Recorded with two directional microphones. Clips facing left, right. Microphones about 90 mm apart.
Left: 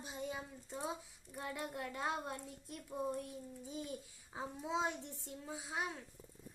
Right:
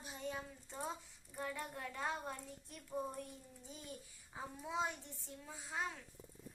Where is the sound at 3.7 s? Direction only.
15° left (ahead or behind).